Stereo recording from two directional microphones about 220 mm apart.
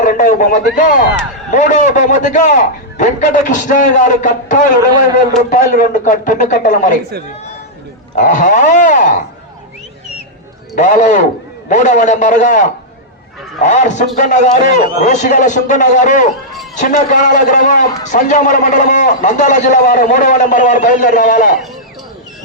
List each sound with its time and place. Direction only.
0.0 s a man's voice: 35° left (ahead or behind)
8.1 s a man's voice: 35° left (ahead or behind)
10.8 s a man's voice: 35° left (ahead or behind)